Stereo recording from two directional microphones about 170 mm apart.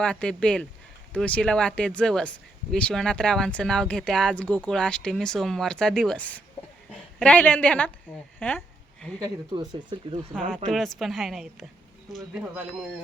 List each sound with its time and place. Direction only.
0.0 s speech: 5° left (ahead or behind)
8.4 s a sound: 10° left (ahead or behind)
9.1 s speech: 25° right (ahead or behind)
10.7 s speech: centre (ahead or behind)